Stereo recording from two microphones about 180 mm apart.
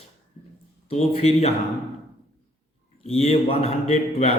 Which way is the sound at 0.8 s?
35° left (ahead or behind).